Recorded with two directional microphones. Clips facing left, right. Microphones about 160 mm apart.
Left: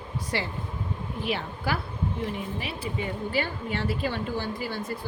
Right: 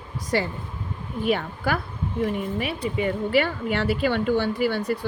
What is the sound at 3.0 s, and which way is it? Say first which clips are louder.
Speech: right 8 dB; 70° right (ahead or behind).